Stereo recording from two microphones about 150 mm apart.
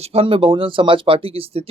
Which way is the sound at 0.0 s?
40° right (ahead or behind).